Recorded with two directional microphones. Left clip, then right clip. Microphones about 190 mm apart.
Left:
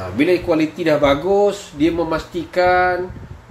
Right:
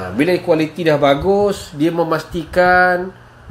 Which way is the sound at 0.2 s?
20° right (ahead or behind).